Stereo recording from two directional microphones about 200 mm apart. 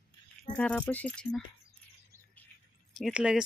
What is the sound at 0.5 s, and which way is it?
Speech, 5° left (ahead or behind).